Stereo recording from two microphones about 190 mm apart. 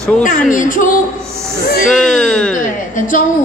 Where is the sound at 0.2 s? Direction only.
40° left (ahead or behind).